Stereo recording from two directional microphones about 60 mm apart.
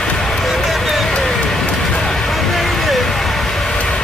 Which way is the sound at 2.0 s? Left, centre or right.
Centre.